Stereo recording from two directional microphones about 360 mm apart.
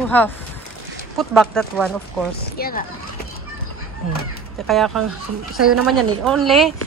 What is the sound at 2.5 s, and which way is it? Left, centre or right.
Speech, left.